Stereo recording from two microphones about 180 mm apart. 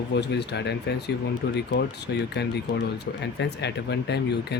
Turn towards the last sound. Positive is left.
turn(degrees=65)  # may be behind; listen again after turning